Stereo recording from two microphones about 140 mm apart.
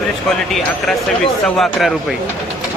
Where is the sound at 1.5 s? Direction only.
Centre (ahead or behind).